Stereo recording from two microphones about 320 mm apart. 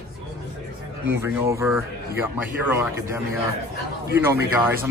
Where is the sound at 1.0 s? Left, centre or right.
Centre.